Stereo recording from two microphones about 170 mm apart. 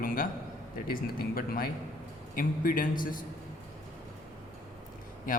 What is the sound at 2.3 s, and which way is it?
Speech, 55° left (ahead or behind).